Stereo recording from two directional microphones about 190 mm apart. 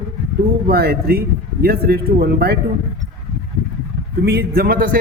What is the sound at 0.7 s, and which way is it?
A man's voice, 55° right (ahead or behind).